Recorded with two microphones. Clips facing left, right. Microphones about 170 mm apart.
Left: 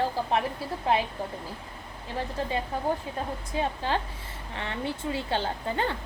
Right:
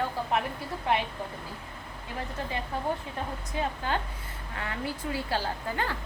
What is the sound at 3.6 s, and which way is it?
A woman's voice, 30° left (ahead or behind).